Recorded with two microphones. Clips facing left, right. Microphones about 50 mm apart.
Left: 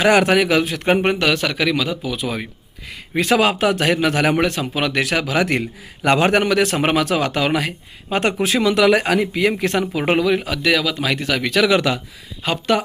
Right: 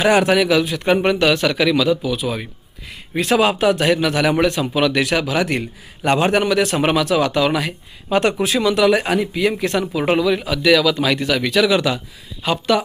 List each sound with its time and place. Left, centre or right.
0.0 s a man's voice: left
8.1 s a man's voice: left
10.7 s speech: left
11.3 s a man's voice: left